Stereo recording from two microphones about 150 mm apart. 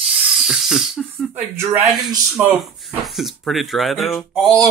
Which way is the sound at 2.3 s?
Centre (ahead or behind).